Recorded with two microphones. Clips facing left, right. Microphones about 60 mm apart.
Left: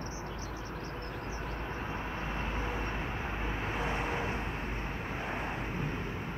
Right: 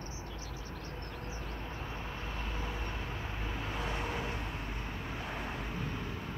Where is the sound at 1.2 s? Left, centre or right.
Left.